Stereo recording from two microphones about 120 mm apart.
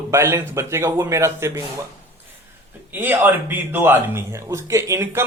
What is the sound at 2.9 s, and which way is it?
A man's voice, 15° right (ahead or behind).